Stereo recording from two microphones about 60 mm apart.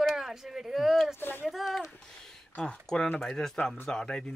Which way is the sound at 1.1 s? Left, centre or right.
Left.